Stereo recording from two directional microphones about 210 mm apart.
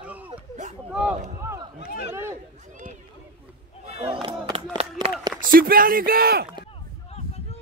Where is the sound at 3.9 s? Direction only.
25° right (ahead or behind).